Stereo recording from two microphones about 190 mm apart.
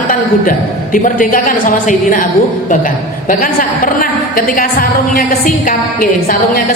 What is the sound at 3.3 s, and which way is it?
A man's voice, 45° left (ahead or behind).